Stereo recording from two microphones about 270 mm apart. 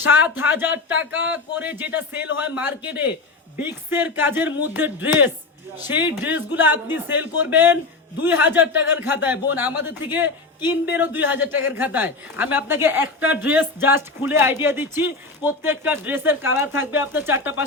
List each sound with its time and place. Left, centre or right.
0.0 s a woman's voice: centre